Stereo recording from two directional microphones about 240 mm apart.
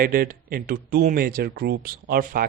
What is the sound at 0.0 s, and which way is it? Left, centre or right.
Speech, right.